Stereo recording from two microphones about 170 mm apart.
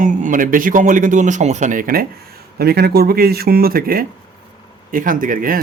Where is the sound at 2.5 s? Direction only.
65° right (ahead or behind).